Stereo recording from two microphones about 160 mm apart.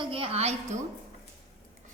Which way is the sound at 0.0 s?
35° right (ahead or behind).